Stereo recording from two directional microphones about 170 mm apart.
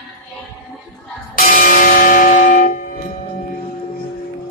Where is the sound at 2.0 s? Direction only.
50° left (ahead or behind).